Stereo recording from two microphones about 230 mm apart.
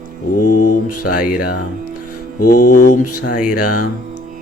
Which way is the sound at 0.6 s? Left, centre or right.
Left.